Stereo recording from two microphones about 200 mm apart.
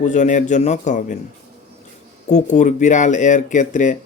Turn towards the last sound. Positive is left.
turn(degrees=40)  # may be behind; listen again after turning